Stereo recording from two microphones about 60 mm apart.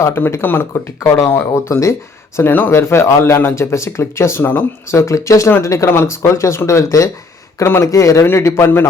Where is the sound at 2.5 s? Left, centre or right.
Left.